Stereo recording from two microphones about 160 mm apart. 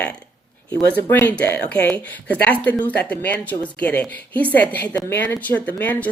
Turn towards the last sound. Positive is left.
turn(degrees=10)  # may be behind; listen again after turning